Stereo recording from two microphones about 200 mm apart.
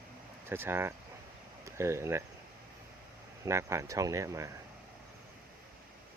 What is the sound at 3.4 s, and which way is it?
Speech, 15° right (ahead or behind).